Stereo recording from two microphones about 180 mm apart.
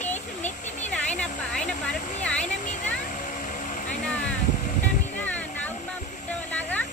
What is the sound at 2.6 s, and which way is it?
Vehicle, 40° left (ahead or behind).